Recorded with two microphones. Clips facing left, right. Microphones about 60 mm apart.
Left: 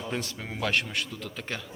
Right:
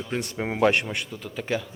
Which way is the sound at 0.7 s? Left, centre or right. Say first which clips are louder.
Right 2 dB; centre.